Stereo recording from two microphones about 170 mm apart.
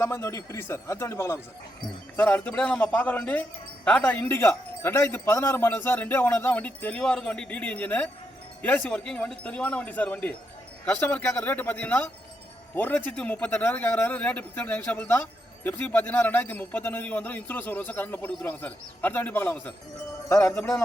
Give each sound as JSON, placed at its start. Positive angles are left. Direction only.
{"t": 0.0, "sound": "speech", "side_deg": 15}